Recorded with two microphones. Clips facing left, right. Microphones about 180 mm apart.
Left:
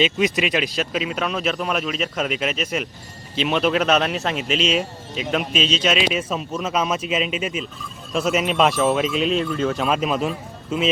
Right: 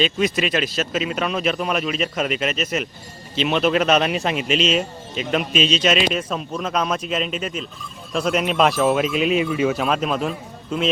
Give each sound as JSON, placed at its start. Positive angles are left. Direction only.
{"t": 0.0, "sound": "speech", "side_deg": 20}
{"t": 0.8, "sound": "speech", "side_deg": 0}